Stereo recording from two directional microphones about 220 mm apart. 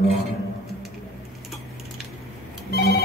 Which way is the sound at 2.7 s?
45° left (ahead or behind).